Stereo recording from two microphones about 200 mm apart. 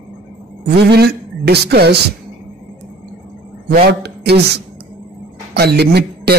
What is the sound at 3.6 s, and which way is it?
Speech, 55° right (ahead or behind).